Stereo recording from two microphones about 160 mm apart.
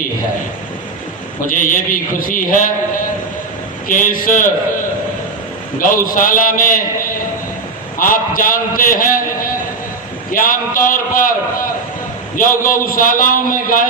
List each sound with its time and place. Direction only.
1.5 s a man's voice: 55° left (ahead or behind)
5.8 s a man's voice: 60° left (ahead or behind)